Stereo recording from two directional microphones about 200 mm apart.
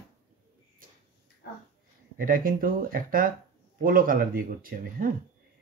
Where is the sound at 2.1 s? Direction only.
45° right (ahead or behind).